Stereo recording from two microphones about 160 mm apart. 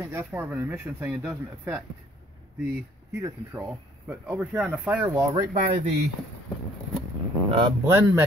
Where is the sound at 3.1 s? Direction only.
20° right (ahead or behind).